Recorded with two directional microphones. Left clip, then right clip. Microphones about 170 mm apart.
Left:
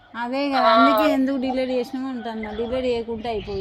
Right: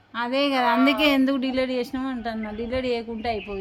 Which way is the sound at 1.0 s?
5° right (ahead or behind).